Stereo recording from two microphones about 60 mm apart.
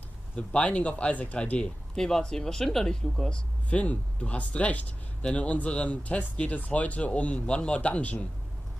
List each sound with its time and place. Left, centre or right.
0.4 s speech: centre